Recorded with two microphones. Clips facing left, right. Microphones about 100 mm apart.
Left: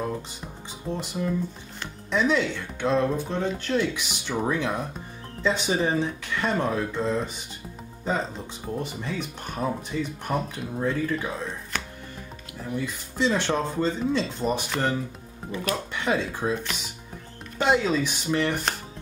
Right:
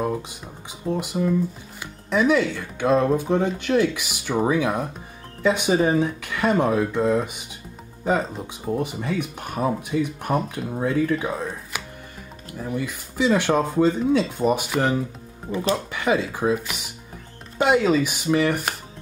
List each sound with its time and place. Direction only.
0.7 s speech: 10° right (ahead or behind)
15.5 s speech: 30° right (ahead or behind)
15.9 s speech: 5° right (ahead or behind)